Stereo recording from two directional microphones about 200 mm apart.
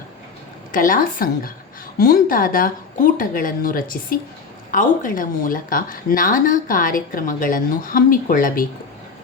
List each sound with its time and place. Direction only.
0.7 s speech: 45° left (ahead or behind)